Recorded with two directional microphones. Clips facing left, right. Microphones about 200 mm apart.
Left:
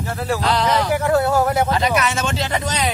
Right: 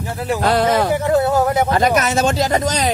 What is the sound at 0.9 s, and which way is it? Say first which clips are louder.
Speech: right 1 dB; 20° right (ahead or behind).